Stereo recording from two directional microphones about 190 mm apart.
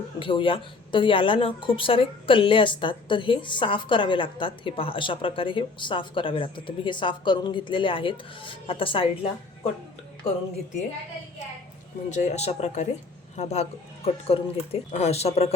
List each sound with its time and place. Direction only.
0.2 s a woman's voice: 25° left (ahead or behind)
12.1 s speech: 35° left (ahead or behind)